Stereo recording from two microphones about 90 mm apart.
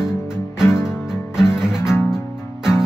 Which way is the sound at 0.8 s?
5° right (ahead or behind).